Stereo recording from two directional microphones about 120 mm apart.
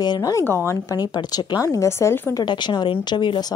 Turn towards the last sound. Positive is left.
turn(degrees=40)  # may be behind; listen again after turning